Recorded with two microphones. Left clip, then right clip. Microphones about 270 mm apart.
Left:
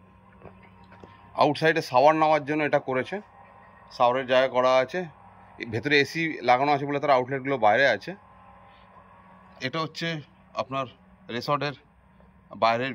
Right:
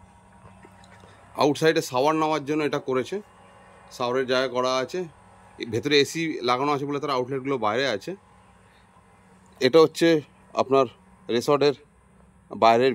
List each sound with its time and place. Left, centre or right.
1.3 s a man's voice: centre
9.6 s a man's voice: right